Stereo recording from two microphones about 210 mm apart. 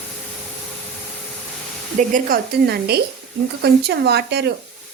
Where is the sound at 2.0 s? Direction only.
40° right (ahead or behind).